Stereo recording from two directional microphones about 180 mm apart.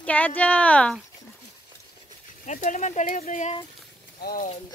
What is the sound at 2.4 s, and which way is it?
Speech, 40° left (ahead or behind).